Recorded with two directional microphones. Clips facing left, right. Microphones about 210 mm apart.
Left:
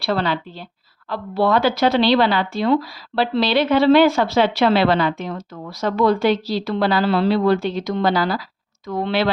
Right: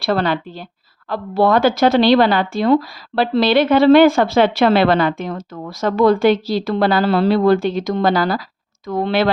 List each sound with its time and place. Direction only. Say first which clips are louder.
0.0 s a woman's voice: right 3 dB; 50° right (ahead or behind)